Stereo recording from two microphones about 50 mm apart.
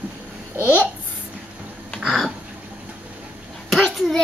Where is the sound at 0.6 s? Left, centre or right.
Left.